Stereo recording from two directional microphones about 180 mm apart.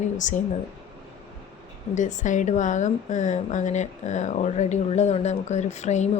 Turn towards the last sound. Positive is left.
turn(degrees=40)  # may be behind; listen again after turning